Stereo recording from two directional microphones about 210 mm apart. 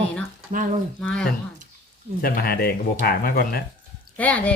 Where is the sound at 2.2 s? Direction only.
45° left (ahead or behind).